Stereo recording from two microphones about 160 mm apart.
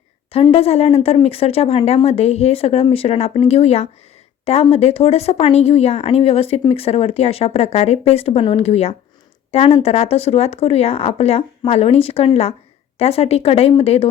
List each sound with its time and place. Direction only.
0.5 s speech: 40° left (ahead or behind)